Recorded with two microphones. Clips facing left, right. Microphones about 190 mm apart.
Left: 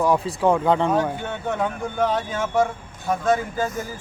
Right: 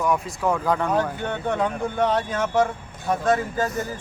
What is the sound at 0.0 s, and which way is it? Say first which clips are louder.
Speech: left 4 dB; 30° left (ahead or behind).